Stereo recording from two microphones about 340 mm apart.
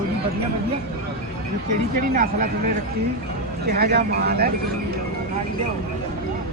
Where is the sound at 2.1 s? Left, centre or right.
Right.